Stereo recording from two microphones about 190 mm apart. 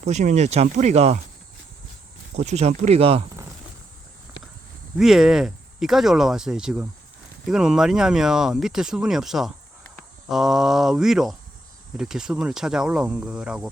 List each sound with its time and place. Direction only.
0.0 s speech: 35° right (ahead or behind)
2.4 s speech: 35° right (ahead or behind)
4.9 s speech: centre (ahead or behind)